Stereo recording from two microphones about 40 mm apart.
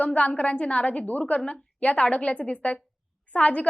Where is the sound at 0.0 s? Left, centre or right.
Left.